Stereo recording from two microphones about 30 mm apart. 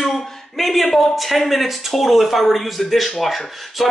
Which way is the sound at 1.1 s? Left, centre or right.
Centre.